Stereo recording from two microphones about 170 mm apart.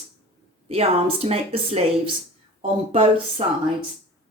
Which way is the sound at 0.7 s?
35° right (ahead or behind).